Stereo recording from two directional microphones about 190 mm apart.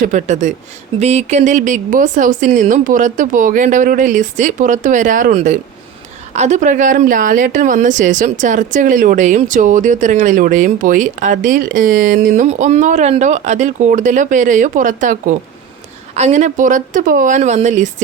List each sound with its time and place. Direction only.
0.0 s a woman's voice: 40° right (ahead or behind)